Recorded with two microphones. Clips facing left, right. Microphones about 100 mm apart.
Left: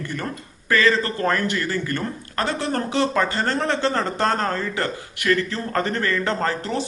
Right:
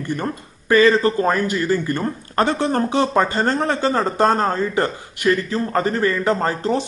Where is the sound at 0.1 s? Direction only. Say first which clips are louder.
Right 5 dB; 20° right (ahead or behind).